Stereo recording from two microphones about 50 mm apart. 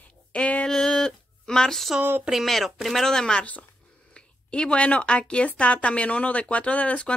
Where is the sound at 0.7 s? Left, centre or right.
Centre.